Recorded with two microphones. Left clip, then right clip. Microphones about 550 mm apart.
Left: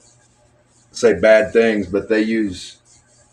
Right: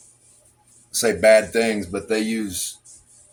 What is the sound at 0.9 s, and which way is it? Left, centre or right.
Speech, right.